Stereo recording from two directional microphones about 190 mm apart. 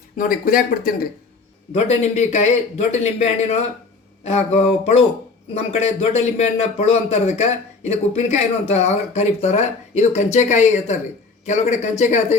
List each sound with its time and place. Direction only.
0.2 s speech: 50° left (ahead or behind)
1.7 s speech: 35° left (ahead or behind)